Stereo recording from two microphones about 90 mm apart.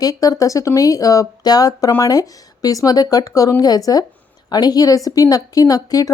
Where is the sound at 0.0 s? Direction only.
45° left (ahead or behind).